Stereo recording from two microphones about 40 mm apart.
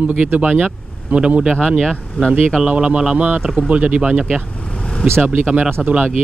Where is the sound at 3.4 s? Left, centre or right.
Right.